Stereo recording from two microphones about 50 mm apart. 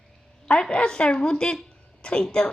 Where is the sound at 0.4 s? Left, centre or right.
Centre.